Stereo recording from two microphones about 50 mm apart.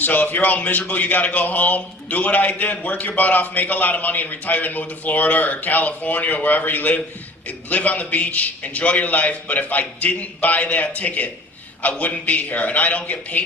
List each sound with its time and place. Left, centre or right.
0.0 s a man's voice: left